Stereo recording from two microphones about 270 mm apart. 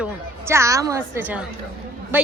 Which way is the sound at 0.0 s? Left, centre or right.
Centre.